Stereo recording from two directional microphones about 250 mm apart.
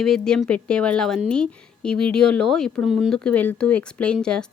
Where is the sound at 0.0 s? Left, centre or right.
Centre.